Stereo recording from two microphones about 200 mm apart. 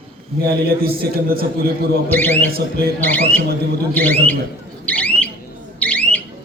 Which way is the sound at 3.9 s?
10° left (ahead or behind).